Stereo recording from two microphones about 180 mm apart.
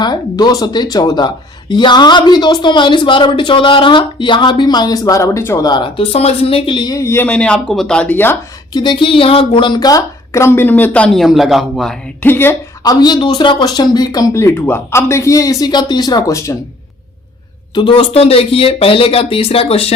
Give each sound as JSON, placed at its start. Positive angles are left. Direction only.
{"t": 0.0, "sound": "speech", "side_deg": 20}
{"t": 8.7, "sound": "a woman's voice", "side_deg": 25}
{"t": 12.8, "sound": "speech", "side_deg": 20}
{"t": 17.7, "sound": "speech", "side_deg": 30}